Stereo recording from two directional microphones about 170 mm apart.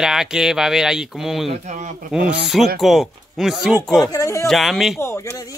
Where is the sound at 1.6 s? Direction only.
45° right (ahead or behind).